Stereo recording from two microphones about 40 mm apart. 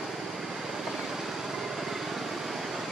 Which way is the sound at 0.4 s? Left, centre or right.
Centre.